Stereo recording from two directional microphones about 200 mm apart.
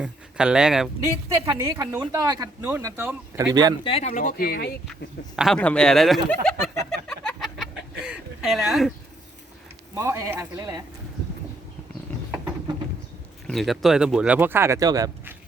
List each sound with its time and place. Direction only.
0.0 s speech: 5° right (ahead or behind)
1.5 s speech: 15° right (ahead or behind)
3.8 s speech: 30° left (ahead or behind); by 4.7 s 50° left (ahead or behind)
5.4 s speech: 5° left (ahead or behind)
7.1 s a sound: centre (ahead or behind)
9.9 s speech: 15° right (ahead or behind)
13.5 s speech: centre (ahead or behind); by 15.3 s 20° right (ahead or behind)